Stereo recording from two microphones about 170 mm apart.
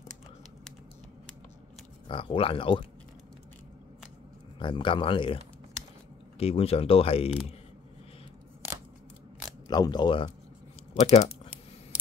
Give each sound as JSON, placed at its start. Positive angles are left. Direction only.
{"t": 2.0, "sound": "speech", "side_deg": 30}
{"t": 4.6, "sound": "speech", "side_deg": 30}
{"t": 6.4, "sound": "speech", "side_deg": 35}
{"t": 9.7, "sound": "speech", "side_deg": 25}
{"t": 11.1, "sound": "speech", "side_deg": 40}